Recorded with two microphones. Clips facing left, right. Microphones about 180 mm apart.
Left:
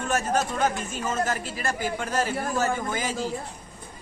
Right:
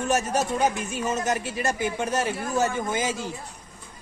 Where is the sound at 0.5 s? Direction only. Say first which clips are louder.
Right 2 dB; 15° right (ahead or behind).